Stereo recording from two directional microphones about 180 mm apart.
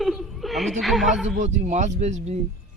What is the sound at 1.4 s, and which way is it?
Speech, 40° right (ahead or behind).